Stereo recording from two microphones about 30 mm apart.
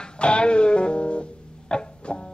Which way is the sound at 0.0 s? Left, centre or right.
Left.